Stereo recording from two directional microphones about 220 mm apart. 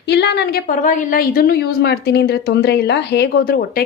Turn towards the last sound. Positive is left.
turn(degrees=45)  # may be behind; listen again after turning